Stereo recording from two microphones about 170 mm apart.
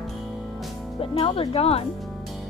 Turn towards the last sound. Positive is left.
turn(degrees=35)  # may be behind; listen again after turning